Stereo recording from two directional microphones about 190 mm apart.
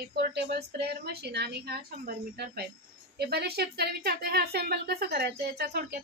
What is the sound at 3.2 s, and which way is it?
A woman's voice, 60° right (ahead or behind).